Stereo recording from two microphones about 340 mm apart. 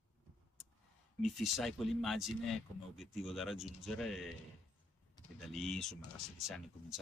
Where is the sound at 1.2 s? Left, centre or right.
Centre.